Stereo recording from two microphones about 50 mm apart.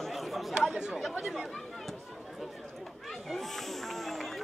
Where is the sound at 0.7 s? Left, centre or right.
Centre.